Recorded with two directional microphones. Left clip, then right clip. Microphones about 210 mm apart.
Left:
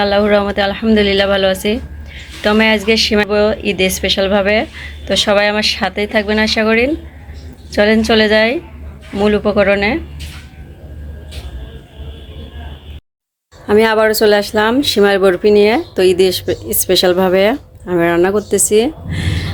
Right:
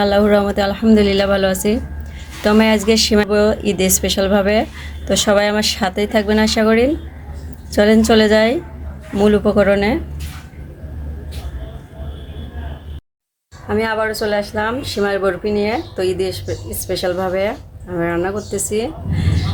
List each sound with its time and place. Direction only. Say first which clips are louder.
0.0 s speech: left 2 dB; 5° right (ahead or behind)
13.7 s speech: left 8 dB; 45° left (ahead or behind)